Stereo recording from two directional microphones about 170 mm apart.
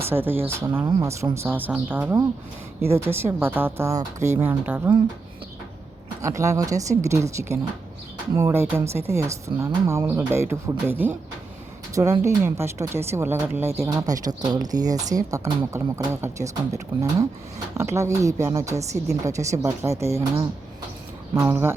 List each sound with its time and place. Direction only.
0.1 s speech: 10° right (ahead or behind)
6.2 s speech: 20° right (ahead or behind)
12.2 s speech: 15° right (ahead or behind)